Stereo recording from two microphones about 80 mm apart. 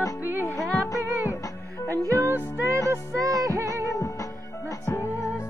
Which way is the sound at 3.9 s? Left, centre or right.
Left.